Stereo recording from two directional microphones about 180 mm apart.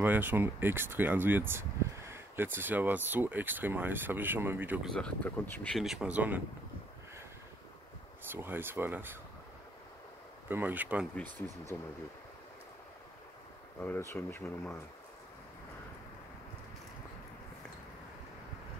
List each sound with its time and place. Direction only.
0.0 s speech: 10° right (ahead or behind)
4.9 s speech: 5° left (ahead or behind)
8.3 s speech: 10° right (ahead or behind)
10.5 s speech: 10° right (ahead or behind)
11.3 s speech: 20° right (ahead or behind)
13.7 s speech: 10° left (ahead or behind)